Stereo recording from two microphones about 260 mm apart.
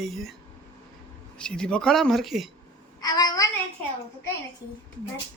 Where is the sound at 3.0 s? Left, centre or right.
Centre.